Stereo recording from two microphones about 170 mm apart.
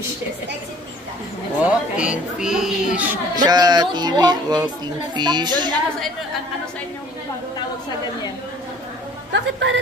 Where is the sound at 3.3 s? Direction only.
25° right (ahead or behind).